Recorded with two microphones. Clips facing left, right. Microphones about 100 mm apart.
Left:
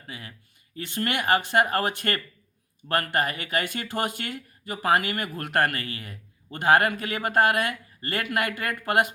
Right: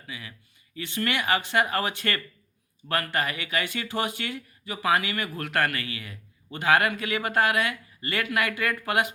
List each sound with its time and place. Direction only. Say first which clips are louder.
0.1 s speech: even; 45° left (ahead or behind)